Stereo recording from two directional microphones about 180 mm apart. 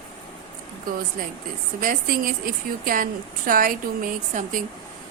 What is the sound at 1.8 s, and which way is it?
A woman's voice, 50° right (ahead or behind).